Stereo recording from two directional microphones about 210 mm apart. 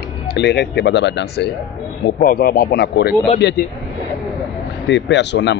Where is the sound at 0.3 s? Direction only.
55° left (ahead or behind).